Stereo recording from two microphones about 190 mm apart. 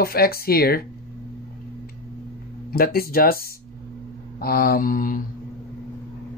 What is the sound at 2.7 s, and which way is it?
Speech, 50° left (ahead or behind).